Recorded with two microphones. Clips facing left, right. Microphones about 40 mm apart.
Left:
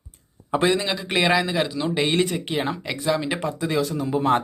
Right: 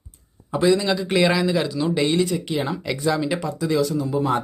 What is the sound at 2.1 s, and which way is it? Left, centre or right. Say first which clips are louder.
Speech: right 1 dB; left.